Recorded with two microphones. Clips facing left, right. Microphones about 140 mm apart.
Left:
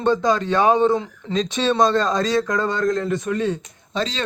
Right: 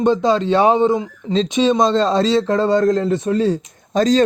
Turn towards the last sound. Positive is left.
turn(degrees=-45)  # may be behind; listen again after turning